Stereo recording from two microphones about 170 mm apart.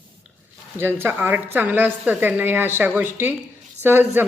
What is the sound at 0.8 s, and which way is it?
A woman's voice, 15° right (ahead or behind).